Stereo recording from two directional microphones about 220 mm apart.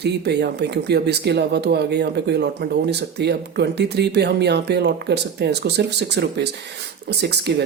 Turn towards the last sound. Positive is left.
turn(degrees=-50)  # may be behind; listen again after turning